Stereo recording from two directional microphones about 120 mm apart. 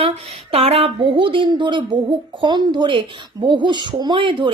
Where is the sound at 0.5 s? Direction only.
55° right (ahead or behind).